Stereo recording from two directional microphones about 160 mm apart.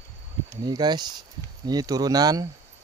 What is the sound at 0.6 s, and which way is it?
Speech, 25° right (ahead or behind).